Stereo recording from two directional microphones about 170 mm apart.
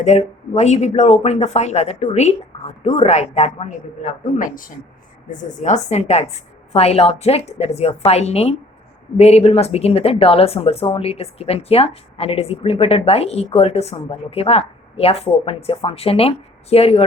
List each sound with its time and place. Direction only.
0.0 s a woman's voice: 40° left (ahead or behind)